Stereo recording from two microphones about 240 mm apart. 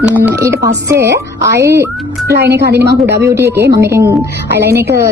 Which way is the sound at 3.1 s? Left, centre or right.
Centre.